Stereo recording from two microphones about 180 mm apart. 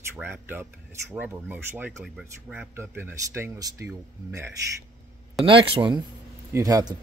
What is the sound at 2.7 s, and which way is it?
Speech, 15° right (ahead or behind).